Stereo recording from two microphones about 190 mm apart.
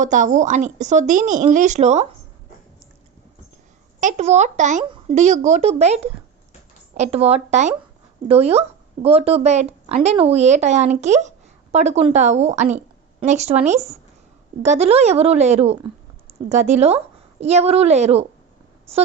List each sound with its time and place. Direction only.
0.0 s speech: 40° right (ahead or behind)
4.0 s a woman's voice: 35° right (ahead or behind)